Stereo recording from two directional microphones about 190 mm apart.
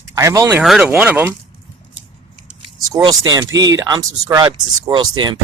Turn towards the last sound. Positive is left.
turn(degrees=-20)  # may be behind; listen again after turning